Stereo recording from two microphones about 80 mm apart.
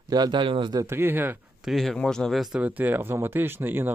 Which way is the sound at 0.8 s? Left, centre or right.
Right.